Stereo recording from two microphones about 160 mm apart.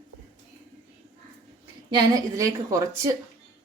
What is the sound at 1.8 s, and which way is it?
Speech, 25° right (ahead or behind).